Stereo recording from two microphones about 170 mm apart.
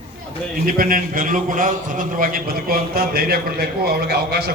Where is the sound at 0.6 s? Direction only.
55° right (ahead or behind).